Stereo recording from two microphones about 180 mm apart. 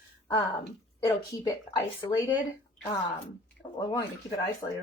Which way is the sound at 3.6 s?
30° left (ahead or behind).